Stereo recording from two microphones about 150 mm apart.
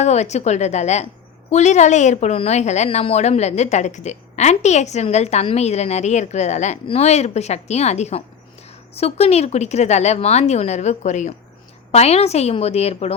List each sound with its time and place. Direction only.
0.0 s a woman's voice: 50° left (ahead or behind)